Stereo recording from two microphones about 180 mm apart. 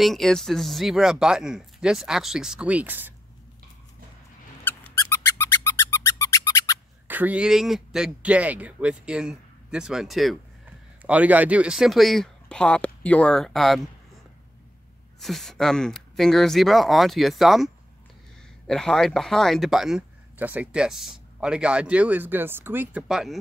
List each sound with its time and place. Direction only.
0.0 s speech: centre (ahead or behind)
4.6 s squeak: 10° left (ahead or behind)
7.1 s speech: 10° right (ahead or behind)
15.1 s speech: centre (ahead or behind)
18.7 s speech: 5° left (ahead or behind)